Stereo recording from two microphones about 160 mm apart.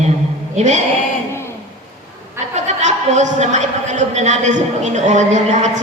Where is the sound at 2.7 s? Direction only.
45° right (ahead or behind).